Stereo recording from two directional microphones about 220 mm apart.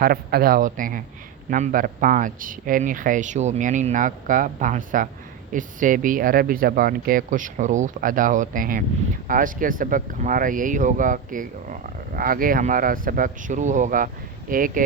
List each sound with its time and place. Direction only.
0.0 s speech: 45° right (ahead or behind)